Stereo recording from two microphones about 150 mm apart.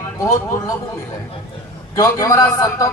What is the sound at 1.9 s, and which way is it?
Speech, 20° left (ahead or behind).